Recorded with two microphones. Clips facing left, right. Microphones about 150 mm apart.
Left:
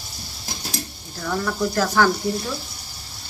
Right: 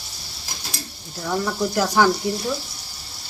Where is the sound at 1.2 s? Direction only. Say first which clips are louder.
Even; 15° right (ahead or behind).